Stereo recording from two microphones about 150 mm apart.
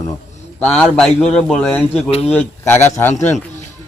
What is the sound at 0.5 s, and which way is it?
A man's voice, 10° left (ahead or behind).